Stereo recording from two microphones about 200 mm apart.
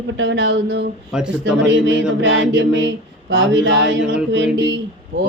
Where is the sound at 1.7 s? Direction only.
70° right (ahead or behind).